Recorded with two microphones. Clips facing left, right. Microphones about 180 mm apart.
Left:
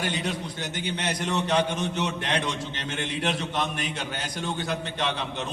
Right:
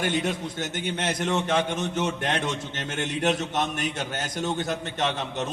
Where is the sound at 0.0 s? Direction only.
50° right (ahead or behind).